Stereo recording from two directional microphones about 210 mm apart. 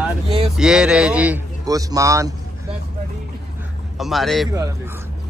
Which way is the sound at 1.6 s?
15° right (ahead or behind).